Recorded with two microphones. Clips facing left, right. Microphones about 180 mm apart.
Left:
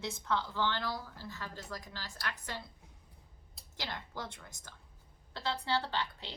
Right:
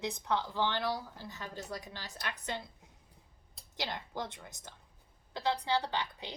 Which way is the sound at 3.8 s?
15° right (ahead or behind).